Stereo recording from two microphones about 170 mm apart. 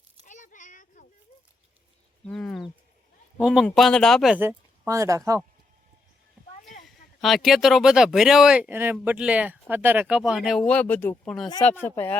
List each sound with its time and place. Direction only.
0.3 s a sound: 45° left (ahead or behind)
2.2 s speech: 5° left (ahead or behind)
4.4 s speech: 15° right (ahead or behind)
6.8 s speech: centre (ahead or behind)